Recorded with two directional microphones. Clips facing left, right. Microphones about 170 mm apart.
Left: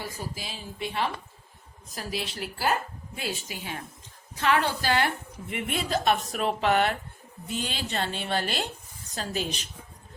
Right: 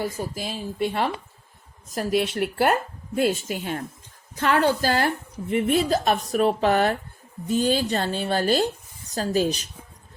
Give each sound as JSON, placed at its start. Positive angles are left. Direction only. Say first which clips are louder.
{"t": 0.0, "sound": "speech", "louder": "right 8 dB", "side_deg": -45}
{"t": 3.2, "sound": "a woman's voice", "louder": "right 12 dB", "side_deg": -50}